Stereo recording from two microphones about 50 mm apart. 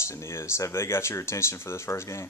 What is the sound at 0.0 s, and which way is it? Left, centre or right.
Speech, left.